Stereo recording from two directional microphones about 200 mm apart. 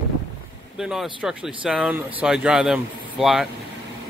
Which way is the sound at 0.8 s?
Centre (ahead or behind).